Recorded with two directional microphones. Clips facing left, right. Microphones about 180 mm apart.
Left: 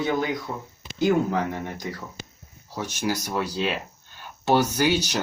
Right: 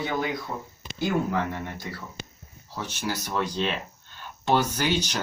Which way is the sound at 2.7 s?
10° left (ahead or behind).